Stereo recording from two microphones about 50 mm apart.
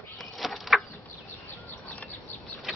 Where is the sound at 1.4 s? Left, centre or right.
Left.